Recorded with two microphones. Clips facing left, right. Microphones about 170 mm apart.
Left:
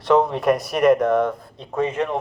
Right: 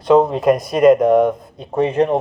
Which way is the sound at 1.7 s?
30° right (ahead or behind).